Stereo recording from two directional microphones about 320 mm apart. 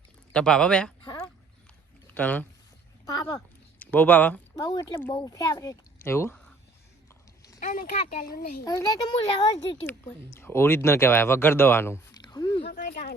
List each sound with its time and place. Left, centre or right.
0.3 s speech: centre
1.0 s a sound: centre
2.1 s speech: centre
7.6 s speech: left
8.6 s a child's voice: centre
12.6 s speech: left